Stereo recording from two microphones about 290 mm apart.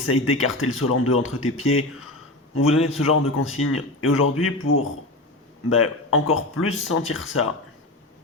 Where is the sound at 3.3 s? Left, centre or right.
Left.